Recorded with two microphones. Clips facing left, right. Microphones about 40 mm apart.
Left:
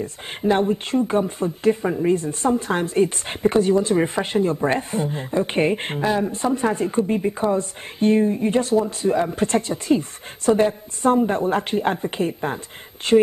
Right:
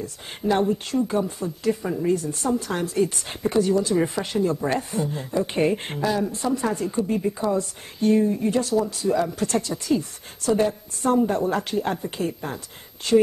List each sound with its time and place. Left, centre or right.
0.0 s speech: left